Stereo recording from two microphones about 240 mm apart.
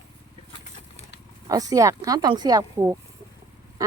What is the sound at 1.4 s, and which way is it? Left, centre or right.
Speech, centre.